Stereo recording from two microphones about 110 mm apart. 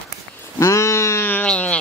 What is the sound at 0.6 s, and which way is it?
Sheep, 25° left (ahead or behind).